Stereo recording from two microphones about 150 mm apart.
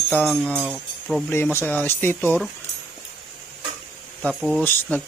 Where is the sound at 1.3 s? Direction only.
15° left (ahead or behind).